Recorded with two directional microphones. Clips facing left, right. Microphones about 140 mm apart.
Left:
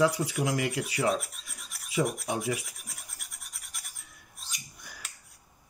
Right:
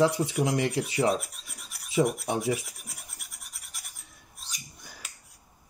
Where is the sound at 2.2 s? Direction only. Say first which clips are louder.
Right 3 dB; 25° right (ahead or behind).